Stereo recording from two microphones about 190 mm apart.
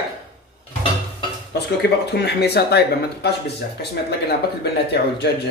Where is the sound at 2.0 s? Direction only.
60° left (ahead or behind).